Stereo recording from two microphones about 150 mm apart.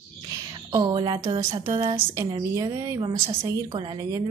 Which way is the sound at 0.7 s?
30° right (ahead or behind).